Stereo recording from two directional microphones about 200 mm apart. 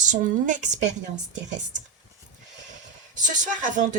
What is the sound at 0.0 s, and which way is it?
Speech, 40° right (ahead or behind).